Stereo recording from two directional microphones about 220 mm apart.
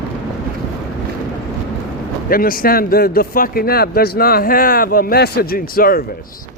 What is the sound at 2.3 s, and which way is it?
Speech, 40° left (ahead or behind).